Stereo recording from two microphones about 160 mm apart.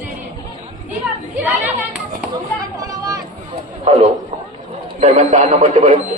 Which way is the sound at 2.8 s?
25° right (ahead or behind).